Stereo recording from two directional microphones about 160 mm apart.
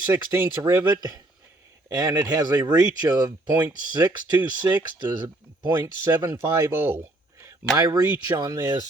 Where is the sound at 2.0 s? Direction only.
25° right (ahead or behind).